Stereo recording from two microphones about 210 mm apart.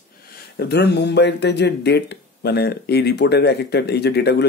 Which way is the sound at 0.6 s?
50° left (ahead or behind).